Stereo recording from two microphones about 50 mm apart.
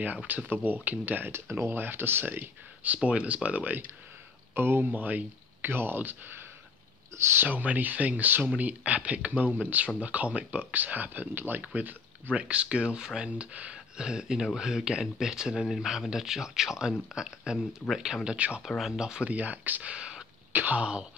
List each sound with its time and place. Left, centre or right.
0.0 s speech: right
1.3 s speech: right
3.0 s speech: right
4.6 s speech: right
7.4 s speech: right; by 19.2 s centre
19.2 s speech: right
19.9 s a sound: centre
20.5 s speech: right
20.8 s speech: centre